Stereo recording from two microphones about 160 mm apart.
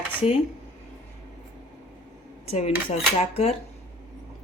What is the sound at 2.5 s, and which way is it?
Speech, 40° left (ahead or behind).